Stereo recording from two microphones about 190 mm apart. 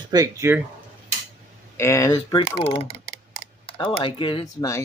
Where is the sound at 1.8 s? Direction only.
15° left (ahead or behind).